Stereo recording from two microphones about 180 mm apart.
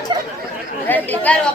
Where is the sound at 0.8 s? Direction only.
10° left (ahead or behind).